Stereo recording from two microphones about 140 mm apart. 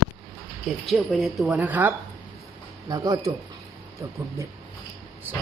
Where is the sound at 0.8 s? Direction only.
Centre (ahead or behind).